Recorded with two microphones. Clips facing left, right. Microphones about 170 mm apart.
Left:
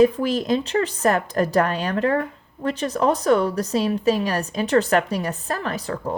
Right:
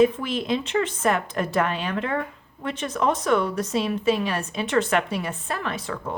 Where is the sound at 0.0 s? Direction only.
40° left (ahead or behind).